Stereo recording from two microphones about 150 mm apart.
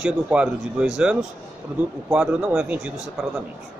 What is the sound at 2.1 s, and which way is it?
A man's voice, 5° right (ahead or behind).